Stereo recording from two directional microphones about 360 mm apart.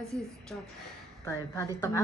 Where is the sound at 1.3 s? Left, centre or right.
Centre.